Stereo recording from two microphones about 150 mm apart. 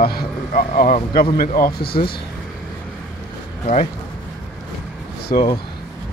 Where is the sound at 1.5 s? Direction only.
85° left.